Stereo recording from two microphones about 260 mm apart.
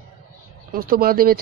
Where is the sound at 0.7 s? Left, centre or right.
Right.